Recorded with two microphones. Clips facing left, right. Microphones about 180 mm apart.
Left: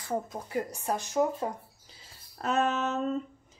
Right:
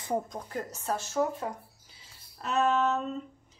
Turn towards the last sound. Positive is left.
turn(degrees=45)  # may be behind; listen again after turning